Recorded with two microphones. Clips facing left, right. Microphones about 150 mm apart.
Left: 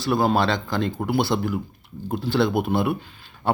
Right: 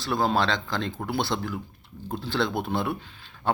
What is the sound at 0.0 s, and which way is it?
Speech, 5° left (ahead or behind).